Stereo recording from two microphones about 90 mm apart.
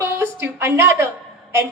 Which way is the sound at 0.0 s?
25° right (ahead or behind).